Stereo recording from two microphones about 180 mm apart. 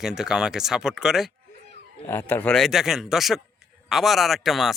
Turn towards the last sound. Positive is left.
turn(degrees=0)  # may be behind; listen again after turning